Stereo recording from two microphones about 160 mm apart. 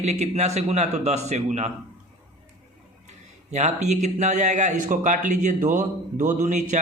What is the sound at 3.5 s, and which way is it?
A man's voice, 45° right (ahead or behind).